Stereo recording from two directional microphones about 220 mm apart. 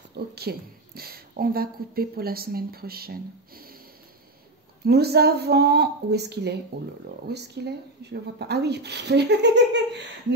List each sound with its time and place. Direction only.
0.1 s speech: 45° right (ahead or behind)
4.8 s speech: 45° right (ahead or behind)